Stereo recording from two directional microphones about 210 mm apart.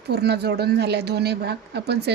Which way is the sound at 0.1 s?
50° right (ahead or behind).